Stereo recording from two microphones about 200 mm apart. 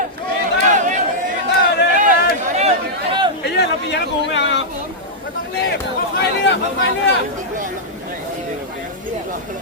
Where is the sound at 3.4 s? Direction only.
55° left (ahead or behind).